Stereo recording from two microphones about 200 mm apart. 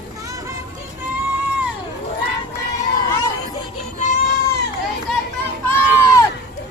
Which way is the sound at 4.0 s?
40° left (ahead or behind).